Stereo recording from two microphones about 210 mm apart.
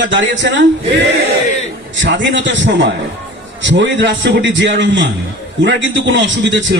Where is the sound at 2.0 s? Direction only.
60° right (ahead or behind).